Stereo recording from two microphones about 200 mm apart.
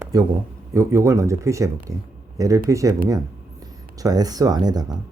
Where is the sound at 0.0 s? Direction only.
15° right (ahead or behind).